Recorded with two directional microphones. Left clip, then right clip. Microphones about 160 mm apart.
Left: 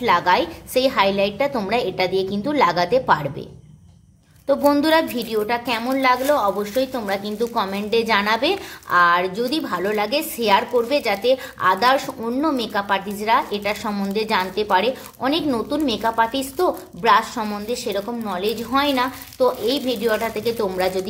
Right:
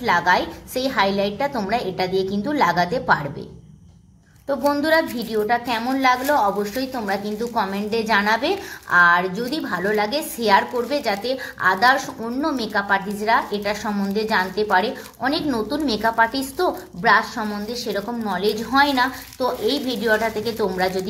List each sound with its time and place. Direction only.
0.0 s a woman's voice: 25° left (ahead or behind)
4.5 s a woman's voice: 25° left (ahead or behind)